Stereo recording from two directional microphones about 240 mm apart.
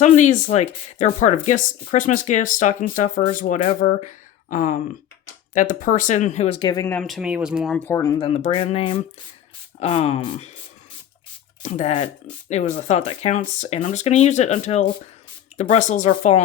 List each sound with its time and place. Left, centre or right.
0.0 s speech: left; by 7.8 s centre
7.9 s speech: centre
11.6 s speech: left